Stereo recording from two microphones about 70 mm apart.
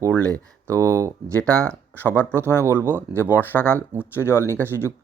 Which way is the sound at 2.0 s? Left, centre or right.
Left.